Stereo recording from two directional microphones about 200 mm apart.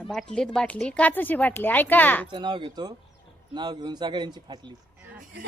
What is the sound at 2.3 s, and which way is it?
Speech, 25° right (ahead or behind).